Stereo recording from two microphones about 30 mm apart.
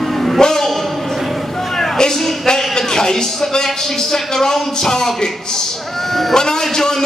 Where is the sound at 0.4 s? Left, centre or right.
Centre.